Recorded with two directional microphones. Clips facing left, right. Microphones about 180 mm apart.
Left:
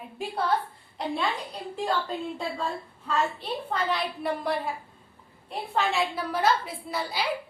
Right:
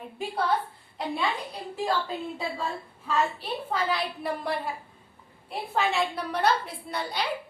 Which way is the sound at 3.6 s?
Centre (ahead or behind).